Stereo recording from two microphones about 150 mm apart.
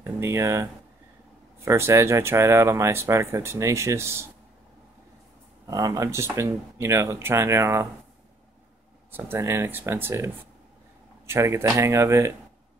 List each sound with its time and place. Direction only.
0.0 s speech: 20° right (ahead or behind)
5.7 s speech: 25° right (ahead or behind)
9.1 s speech: 15° right (ahead or behind)